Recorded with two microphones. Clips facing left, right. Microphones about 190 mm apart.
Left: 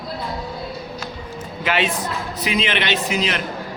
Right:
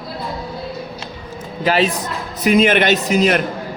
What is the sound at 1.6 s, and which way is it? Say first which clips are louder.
Speech: right 5 dB; 35° right (ahead or behind).